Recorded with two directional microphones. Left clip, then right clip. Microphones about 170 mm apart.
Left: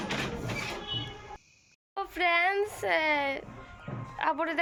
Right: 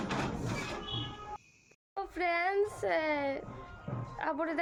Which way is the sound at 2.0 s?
10° right (ahead or behind).